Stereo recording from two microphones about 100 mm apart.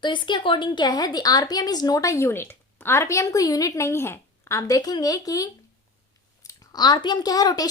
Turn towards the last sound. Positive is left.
turn(degrees=40)  # may be behind; listen again after turning